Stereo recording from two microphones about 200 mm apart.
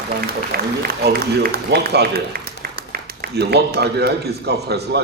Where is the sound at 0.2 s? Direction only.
50° right (ahead or behind).